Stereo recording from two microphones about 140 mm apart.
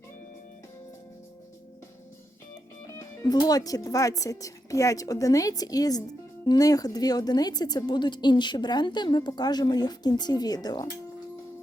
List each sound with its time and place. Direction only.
3.0 s a woman's voice: 25° left (ahead or behind)